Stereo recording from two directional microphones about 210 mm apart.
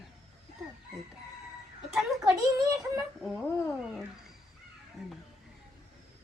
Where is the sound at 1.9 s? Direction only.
Centre (ahead or behind).